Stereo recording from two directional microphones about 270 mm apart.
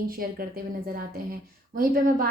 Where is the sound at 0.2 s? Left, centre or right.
Right.